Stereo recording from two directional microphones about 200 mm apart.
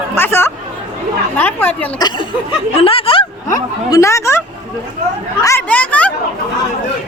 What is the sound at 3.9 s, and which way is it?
Speech, 15° left (ahead or behind).